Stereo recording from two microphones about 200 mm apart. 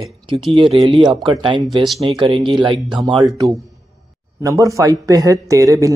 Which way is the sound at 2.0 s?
25° right (ahead or behind).